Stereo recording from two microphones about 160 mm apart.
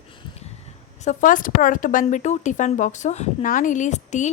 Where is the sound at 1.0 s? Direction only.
50° left (ahead or behind).